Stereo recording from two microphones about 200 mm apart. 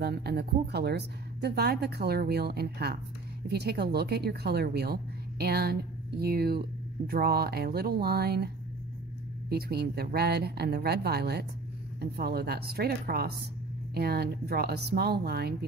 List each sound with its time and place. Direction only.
0.0 s speech: 55° right (ahead or behind)
9.5 s speech: 50° right (ahead or behind)